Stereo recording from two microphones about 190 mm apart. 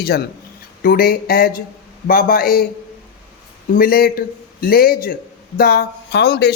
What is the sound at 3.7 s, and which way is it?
A man's voice, 50° left (ahead or behind).